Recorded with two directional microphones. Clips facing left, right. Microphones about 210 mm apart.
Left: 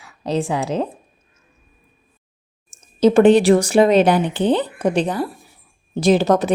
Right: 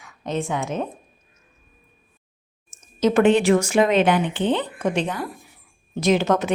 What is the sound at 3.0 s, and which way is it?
A woman's voice, 30° left (ahead or behind).